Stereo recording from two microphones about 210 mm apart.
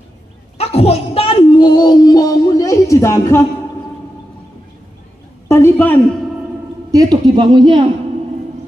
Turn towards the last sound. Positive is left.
turn(degrees=-20)  # may be behind; listen again after turning